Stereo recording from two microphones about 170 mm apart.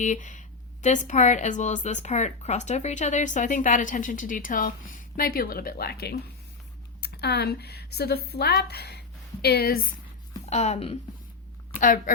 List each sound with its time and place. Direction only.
0.0 s a woman's voice: 45° left (ahead or behind)
10.4 s speech: 40° left (ahead or behind)
11.8 s speech: 50° left (ahead or behind)